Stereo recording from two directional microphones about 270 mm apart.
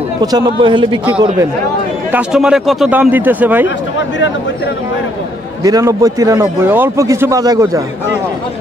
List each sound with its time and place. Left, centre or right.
0.2 s a man's voice: centre
2.1 s speech: centre
5.6 s a man's voice: centre